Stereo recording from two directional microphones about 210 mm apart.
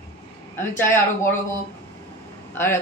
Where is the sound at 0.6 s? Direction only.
10° left (ahead or behind).